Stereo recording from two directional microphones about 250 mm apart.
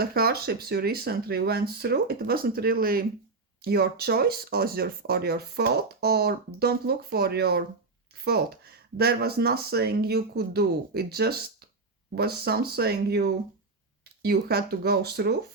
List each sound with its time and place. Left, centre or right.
0.0 s speech: right